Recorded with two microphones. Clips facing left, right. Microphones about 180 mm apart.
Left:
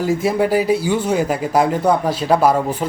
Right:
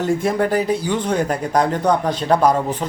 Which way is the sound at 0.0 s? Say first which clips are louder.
Left 1 dB; 5° left (ahead or behind).